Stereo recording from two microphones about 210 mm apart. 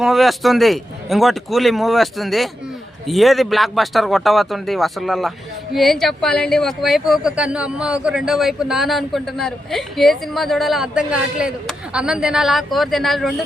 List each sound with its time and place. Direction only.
0.0 s speech: centre (ahead or behind)